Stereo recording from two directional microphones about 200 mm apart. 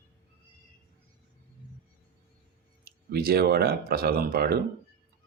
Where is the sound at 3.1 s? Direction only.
50° right (ahead or behind).